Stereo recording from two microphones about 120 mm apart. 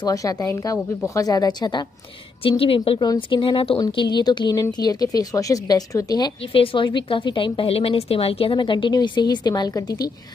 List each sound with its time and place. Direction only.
0.0 s speech: 30° left (ahead or behind)
2.4 s a woman's voice: 50° left (ahead or behind); by 6.3 s 35° left (ahead or behind)
6.5 s a woman's voice: 45° left (ahead or behind); by 10.1 s 30° left (ahead or behind)